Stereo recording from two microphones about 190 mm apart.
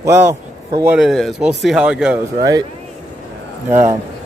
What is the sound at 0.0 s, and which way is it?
Speech, 15° right (ahead or behind).